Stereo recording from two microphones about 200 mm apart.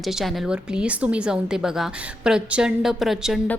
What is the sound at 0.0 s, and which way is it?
A woman's voice, centre (ahead or behind).